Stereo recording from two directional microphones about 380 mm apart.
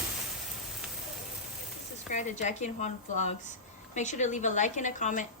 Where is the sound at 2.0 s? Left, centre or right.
Centre.